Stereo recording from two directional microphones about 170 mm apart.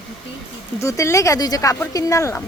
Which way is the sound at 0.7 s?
20° left (ahead or behind).